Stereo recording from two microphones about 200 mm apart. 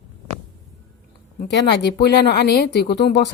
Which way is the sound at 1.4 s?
55° left (ahead or behind).